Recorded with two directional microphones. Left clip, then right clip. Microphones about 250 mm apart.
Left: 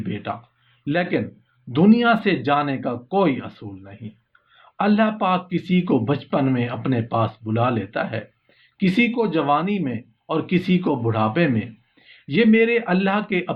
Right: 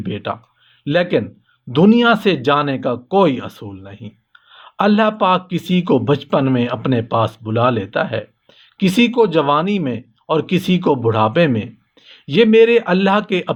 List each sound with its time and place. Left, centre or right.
0.0 s speech: right